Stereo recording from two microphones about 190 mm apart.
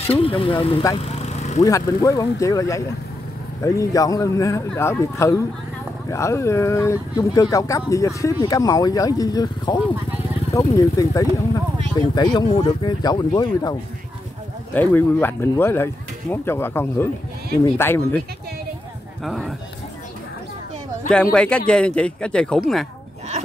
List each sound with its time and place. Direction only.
0.0 s speech: 30° left (ahead or behind)
0.9 s a sound: 35° left (ahead or behind)
1.6 s speech: 15° left (ahead or behind)
10.8 s speech: 20° left (ahead or behind)
14.7 s speech: 10° left (ahead or behind)
19.2 s speech: centre (ahead or behind)
21.1 s speech: 5° left (ahead or behind)